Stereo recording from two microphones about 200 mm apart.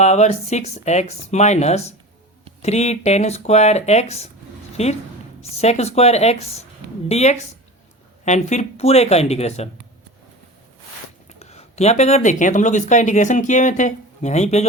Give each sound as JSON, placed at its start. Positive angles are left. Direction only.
{"t": 0.0, "sound": "speech", "side_deg": 35}
{"t": 11.3, "sound": "speech", "side_deg": 35}